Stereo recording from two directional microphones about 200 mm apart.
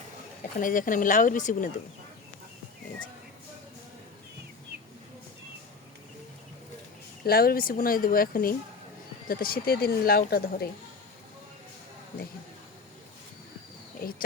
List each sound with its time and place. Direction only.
0.6 s speech: 40° left (ahead or behind)
7.3 s speech: 50° left (ahead or behind)